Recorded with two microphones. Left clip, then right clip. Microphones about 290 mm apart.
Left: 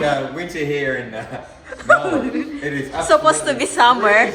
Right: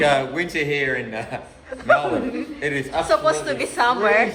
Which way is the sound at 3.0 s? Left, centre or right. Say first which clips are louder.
Left 6 dB; centre.